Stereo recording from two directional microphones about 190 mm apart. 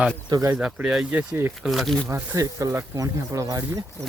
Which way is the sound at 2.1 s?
15° right (ahead or behind).